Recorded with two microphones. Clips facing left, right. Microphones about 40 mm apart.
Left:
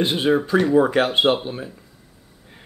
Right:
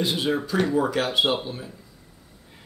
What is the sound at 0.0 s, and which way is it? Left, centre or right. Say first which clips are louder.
Speech: left 5 dB; left.